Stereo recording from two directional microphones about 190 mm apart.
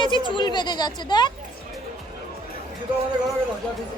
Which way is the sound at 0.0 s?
25° left (ahead or behind).